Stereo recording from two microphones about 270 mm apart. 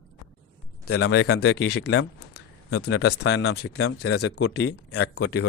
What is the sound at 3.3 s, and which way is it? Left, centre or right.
Speech, left.